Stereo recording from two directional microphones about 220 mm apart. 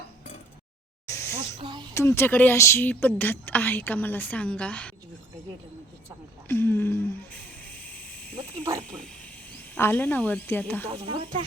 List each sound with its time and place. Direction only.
1.0 s snake: 10° left (ahead or behind)
1.5 s speech: 20° right (ahead or behind)
1.9 s a woman's voice: 10° left (ahead or behind)
6.5 s a sound: 10° left (ahead or behind)
8.8 s speech: 5° left (ahead or behind)
11.0 s speech: 25° right (ahead or behind)